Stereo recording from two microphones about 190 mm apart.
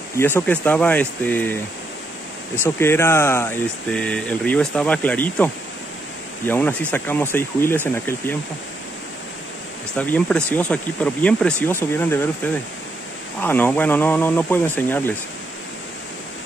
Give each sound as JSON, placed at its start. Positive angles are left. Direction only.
{"t": 0.2, "sound": "speech", "side_deg": 10}
{"t": 2.6, "sound": "speech", "side_deg": 15}
{"t": 9.9, "sound": "speech", "side_deg": 5}
{"t": 13.4, "sound": "speech", "side_deg": 10}